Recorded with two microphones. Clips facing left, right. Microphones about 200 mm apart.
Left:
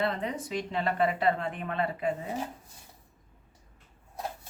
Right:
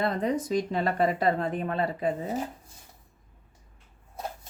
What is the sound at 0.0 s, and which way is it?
Speech, 40° right (ahead or behind).